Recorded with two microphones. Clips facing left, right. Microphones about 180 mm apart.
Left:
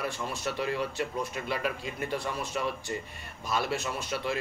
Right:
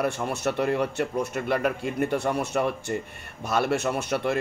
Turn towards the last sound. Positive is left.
turn(degrees=-60)  # may be behind; listen again after turning